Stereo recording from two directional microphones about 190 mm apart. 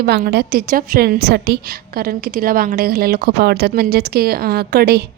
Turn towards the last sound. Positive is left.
turn(degrees=-55)  # may be behind; listen again after turning